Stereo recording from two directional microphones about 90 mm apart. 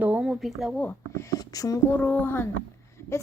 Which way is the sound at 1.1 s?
40° left (ahead or behind).